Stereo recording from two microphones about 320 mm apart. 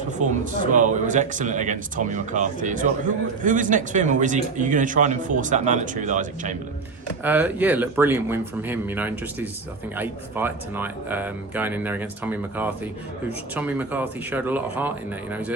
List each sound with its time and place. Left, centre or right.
0.2 s speech: right
7.3 s speech: centre